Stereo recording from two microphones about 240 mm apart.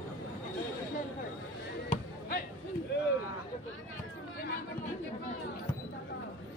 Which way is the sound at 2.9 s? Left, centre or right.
Left.